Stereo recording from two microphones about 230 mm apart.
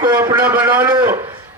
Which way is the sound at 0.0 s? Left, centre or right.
Centre.